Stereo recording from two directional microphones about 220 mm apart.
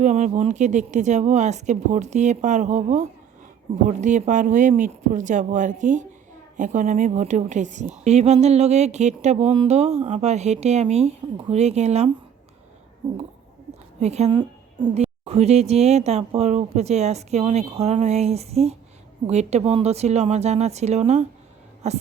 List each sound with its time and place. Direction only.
0.0 s a woman's voice: 30° right (ahead or behind)